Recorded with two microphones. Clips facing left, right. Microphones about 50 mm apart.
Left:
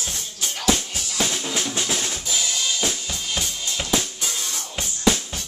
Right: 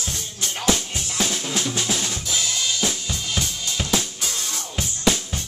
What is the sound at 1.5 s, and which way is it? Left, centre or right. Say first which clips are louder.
Drum kit: right 2 dB; centre.